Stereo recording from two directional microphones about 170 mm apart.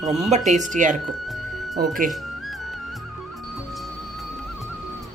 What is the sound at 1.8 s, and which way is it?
Speech, 55° right (ahead or behind).